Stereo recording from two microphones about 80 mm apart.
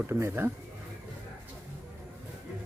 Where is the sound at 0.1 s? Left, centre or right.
Right.